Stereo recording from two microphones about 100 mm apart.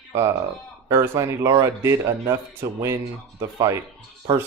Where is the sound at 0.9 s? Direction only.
30° right (ahead or behind).